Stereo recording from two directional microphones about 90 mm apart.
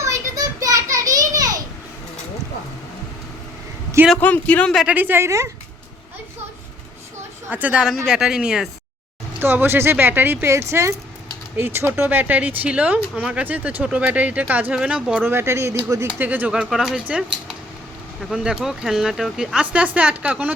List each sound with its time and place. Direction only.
0.0 s a sound: 40° right (ahead or behind)
4.2 s a man's voice: 15° left (ahead or behind)
4.9 s speech: 20° right (ahead or behind)
7.5 s speech: 15° right (ahead or behind)
9.4 s speech: 25° right (ahead or behind)
15.3 s speech: 30° right (ahead or behind)
16.2 s speech: 20° right (ahead or behind)
16.5 s speech: 5° right (ahead or behind)